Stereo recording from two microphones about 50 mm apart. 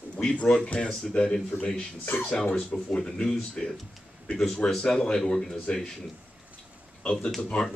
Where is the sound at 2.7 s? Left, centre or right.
Centre.